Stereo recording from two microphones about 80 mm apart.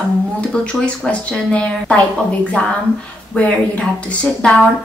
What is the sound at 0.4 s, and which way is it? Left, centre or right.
A woman's voice, centre.